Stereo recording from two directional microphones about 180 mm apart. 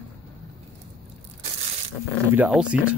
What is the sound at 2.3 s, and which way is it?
Speech, 5° right (ahead or behind).